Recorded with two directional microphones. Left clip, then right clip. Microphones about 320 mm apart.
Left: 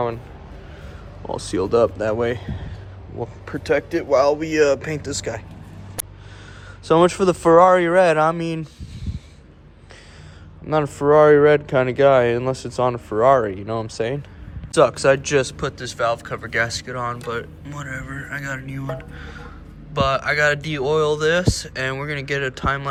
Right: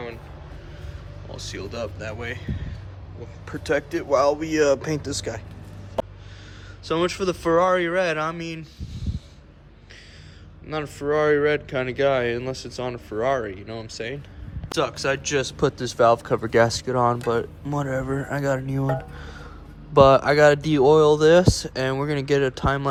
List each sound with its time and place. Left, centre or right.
1.4 s speech: centre
6.8 s speech: centre
10.7 s speech: centre